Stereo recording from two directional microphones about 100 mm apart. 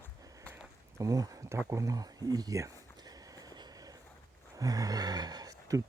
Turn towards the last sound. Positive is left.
turn(degrees=-40)  # may be behind; listen again after turning